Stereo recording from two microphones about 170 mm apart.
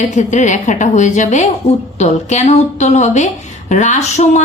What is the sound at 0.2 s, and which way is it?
A woman's voice, 45° left (ahead or behind).